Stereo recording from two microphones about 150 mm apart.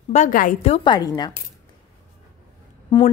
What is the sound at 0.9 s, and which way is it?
Speech, 25° left (ahead or behind).